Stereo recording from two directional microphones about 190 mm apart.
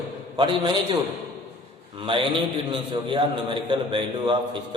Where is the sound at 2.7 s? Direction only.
25° right (ahead or behind).